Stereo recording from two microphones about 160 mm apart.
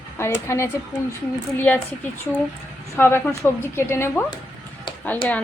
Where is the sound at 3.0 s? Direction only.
15° left (ahead or behind).